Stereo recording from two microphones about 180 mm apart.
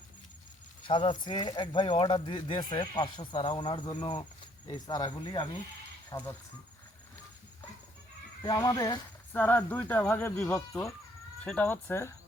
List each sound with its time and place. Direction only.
0.9 s speech: 25° left (ahead or behind)
8.4 s speech: 20° left (ahead or behind)